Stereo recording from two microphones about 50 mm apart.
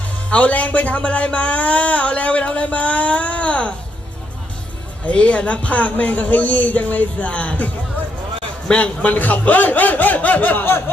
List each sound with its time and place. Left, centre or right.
0.3 s speech: left
5.0 s speech: left
8.7 s speech: left